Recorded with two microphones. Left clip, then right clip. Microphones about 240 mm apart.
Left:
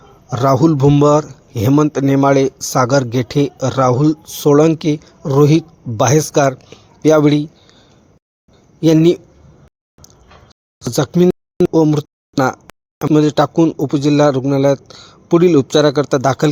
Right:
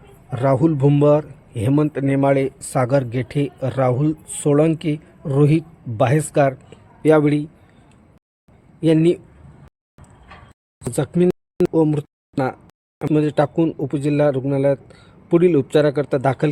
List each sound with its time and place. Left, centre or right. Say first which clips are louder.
0.3 s speech: left 5 dB; centre
8.8 s speech: left 5 dB; centre
10.9 s speech: left 5 dB; centre
11.3 s a sound: left 5 dB; centre
11.7 s speech: left 6 dB; centre